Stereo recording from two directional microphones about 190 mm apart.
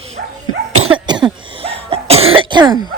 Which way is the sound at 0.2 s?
55° right (ahead or behind).